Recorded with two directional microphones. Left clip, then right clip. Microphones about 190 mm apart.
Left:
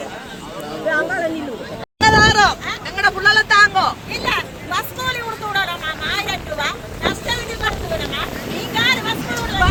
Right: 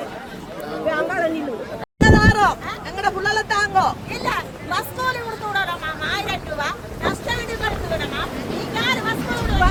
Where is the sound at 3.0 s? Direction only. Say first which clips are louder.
Left 7 dB; 10° right (ahead or behind).